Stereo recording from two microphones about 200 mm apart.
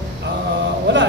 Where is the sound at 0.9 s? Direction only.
60° right (ahead or behind).